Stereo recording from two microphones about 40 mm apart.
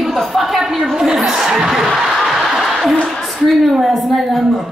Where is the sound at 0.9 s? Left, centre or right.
Centre.